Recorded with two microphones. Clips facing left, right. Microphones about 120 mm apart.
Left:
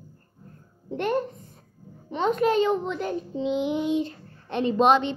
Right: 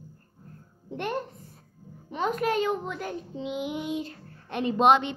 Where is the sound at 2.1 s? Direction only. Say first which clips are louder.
Left 5 dB; 5° right (ahead or behind).